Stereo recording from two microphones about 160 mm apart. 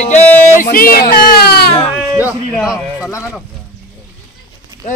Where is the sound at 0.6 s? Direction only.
65° left (ahead or behind); by 1.7 s 80° left.